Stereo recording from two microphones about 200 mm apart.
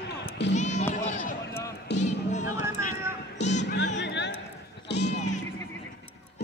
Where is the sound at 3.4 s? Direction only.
60° left (ahead or behind).